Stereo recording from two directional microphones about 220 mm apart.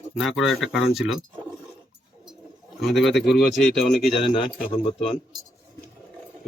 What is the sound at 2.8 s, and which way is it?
Speech, centre (ahead or behind).